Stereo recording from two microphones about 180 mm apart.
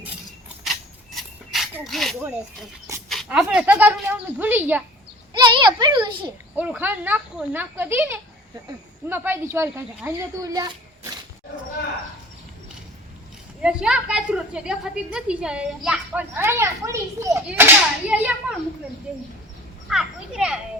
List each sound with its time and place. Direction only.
0.6 s a sound: centre (ahead or behind)
3.1 s speech: centre (ahead or behind)
5.3 s a child's voice: 25° right (ahead or behind)
6.6 s speech: 10° right (ahead or behind)
13.6 s a woman's voice: 5° right (ahead or behind)
19.9 s a woman's voice: 5° right (ahead or behind)